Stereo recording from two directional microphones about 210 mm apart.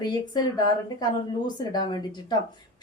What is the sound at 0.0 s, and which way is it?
A woman's voice, 20° left (ahead or behind).